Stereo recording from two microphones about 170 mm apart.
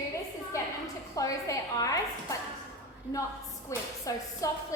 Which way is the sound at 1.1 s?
20° left (ahead or behind).